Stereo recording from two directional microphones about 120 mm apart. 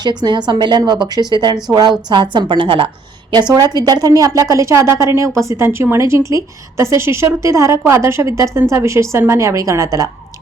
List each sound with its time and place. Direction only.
0.0 s a woman's voice: 35° right (ahead or behind)
3.5 s a woman's voice: 35° right (ahead or behind)